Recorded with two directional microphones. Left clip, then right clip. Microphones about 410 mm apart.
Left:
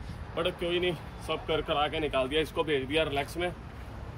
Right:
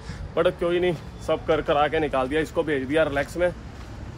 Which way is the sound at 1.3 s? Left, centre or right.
Right.